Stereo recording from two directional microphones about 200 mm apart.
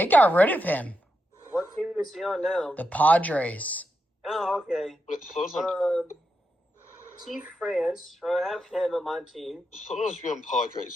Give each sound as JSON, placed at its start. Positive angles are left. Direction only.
{"t": 0.0, "sound": "a woman's voice", "side_deg": 10}
{"t": 7.3, "sound": "speech", "side_deg": -5}
{"t": 9.7, "sound": "speech", "side_deg": 35}